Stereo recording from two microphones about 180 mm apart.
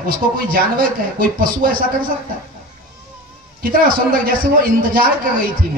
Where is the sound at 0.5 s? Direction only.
50° right (ahead or behind).